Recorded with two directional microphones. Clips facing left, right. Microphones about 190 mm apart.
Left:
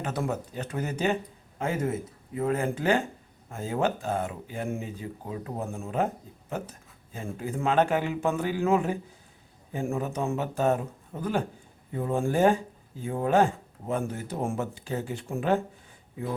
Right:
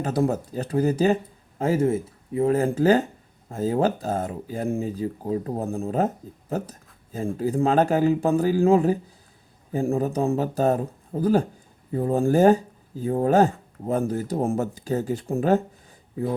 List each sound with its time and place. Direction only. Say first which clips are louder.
0.0 s speech: right 7 dB; 35° right (ahead or behind)